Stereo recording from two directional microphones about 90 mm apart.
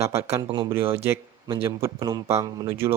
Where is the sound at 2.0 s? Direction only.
40° right (ahead or behind).